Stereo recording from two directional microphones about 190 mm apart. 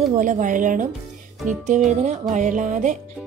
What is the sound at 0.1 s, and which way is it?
Speech, 40° right (ahead or behind).